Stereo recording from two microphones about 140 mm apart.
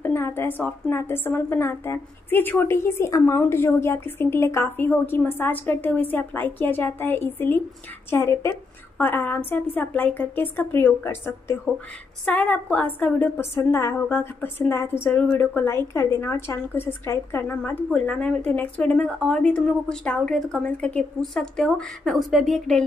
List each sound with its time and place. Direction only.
0.0 s a woman's voice: 15° left (ahead or behind)